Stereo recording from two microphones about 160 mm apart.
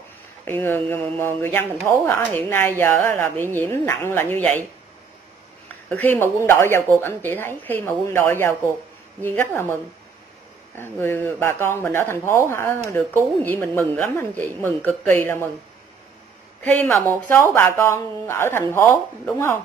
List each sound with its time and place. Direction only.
0.5 s speech: 10° left (ahead or behind)
5.9 s speech: 10° left (ahead or behind)
10.8 s speech: 15° left (ahead or behind)
16.6 s speech: 10° left (ahead or behind)